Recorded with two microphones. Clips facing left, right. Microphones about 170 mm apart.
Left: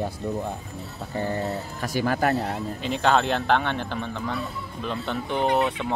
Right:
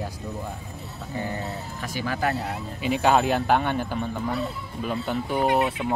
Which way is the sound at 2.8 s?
10° right (ahead or behind).